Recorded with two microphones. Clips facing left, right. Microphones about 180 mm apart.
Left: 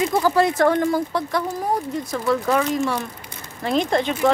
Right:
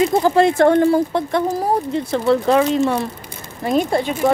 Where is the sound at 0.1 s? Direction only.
25° right (ahead or behind).